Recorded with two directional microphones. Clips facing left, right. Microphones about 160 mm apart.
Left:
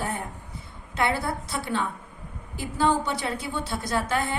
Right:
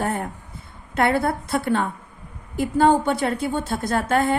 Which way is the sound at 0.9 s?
55° right (ahead or behind).